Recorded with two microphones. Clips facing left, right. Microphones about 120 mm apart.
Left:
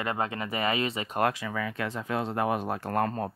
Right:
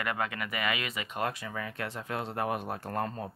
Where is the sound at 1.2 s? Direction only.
90° left.